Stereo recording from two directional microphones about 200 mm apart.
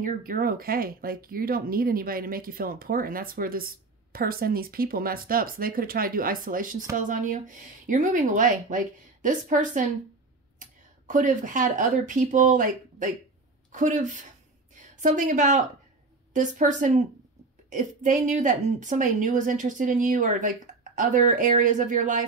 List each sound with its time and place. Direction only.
0.0 s a woman's voice: 45° right (ahead or behind)